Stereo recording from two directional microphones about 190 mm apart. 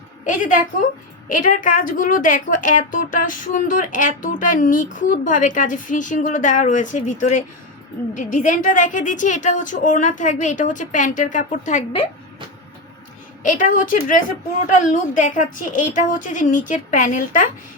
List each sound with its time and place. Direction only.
0.3 s a woman's voice: 45° left (ahead or behind)
13.4 s a woman's voice: 45° left (ahead or behind)